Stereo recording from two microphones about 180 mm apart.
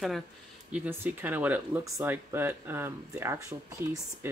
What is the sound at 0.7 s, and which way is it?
Speech, 10° right (ahead or behind).